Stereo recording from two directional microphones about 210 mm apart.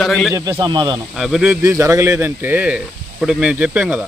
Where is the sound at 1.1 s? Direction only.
Centre (ahead or behind).